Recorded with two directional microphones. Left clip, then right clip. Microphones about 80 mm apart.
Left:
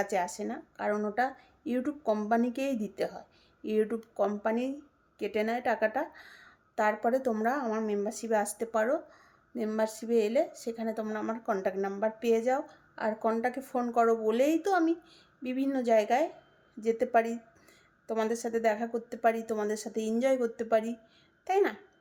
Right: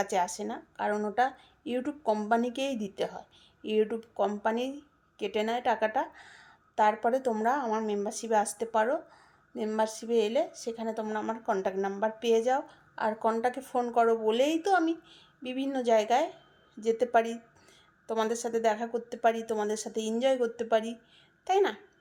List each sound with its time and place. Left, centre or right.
0.0 s a woman's voice: left